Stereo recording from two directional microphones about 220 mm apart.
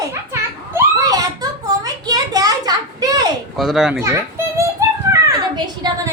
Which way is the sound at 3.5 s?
Centre (ahead or behind).